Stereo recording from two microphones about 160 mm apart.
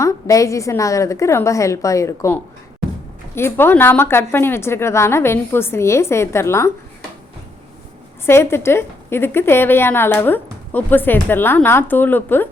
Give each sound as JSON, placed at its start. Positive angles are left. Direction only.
{"t": 0.0, "sound": "a woman's voice", "side_deg": 20}
{"t": 8.3, "sound": "a woman's voice", "side_deg": 15}